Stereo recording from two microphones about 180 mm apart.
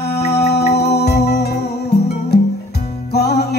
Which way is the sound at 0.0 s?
65° left (ahead or behind).